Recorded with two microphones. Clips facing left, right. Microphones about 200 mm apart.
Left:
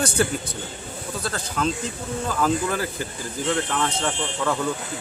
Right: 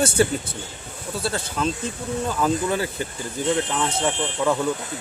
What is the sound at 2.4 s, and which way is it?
Speech, 25° right (ahead or behind).